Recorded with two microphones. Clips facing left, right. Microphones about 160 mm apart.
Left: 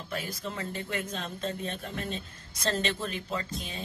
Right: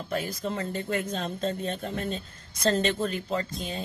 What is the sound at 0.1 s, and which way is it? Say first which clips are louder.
Speech: right 5 dB; 40° right (ahead or behind).